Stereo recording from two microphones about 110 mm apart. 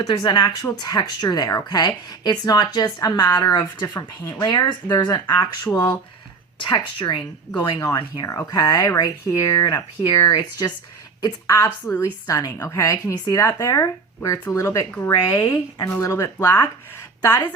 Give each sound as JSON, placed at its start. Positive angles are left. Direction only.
{"t": 0.0, "sound": "speech", "side_deg": 40}
{"t": 3.9, "sound": "speech", "side_deg": 25}
{"t": 4.4, "sound": "speech", "side_deg": 40}
{"t": 6.6, "sound": "speech", "side_deg": 45}